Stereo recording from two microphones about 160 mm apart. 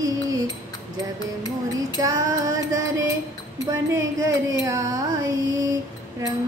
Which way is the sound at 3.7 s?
20° right (ahead or behind).